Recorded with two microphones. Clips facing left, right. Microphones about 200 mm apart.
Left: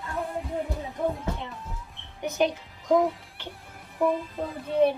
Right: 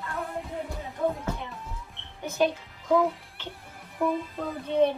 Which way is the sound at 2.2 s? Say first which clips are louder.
Even; 20° left (ahead or behind).